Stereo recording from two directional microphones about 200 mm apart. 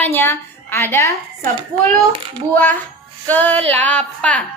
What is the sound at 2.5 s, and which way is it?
A woman's voice, 10° left (ahead or behind).